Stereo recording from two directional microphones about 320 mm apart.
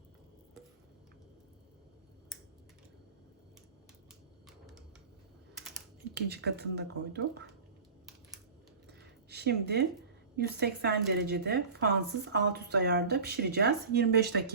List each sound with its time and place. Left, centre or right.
4.4 s a sound: centre
6.1 s speech: right
9.3 s speech: right